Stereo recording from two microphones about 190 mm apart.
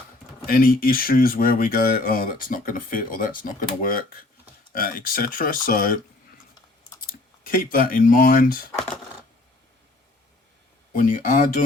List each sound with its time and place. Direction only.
0.4 s speech: 50° left (ahead or behind)
7.1 s speech: 45° left (ahead or behind)
10.9 s speech: 45° left (ahead or behind)